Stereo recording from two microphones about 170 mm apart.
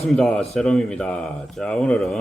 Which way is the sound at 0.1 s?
5° left (ahead or behind).